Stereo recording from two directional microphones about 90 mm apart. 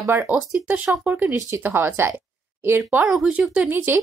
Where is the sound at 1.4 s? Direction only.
30° right (ahead or behind).